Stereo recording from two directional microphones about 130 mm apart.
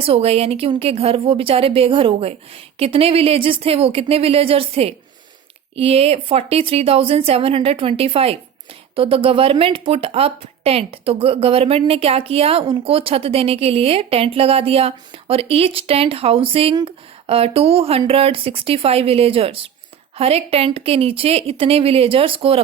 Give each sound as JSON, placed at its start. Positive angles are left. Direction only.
{"t": 0.0, "sound": "speech", "side_deg": -50}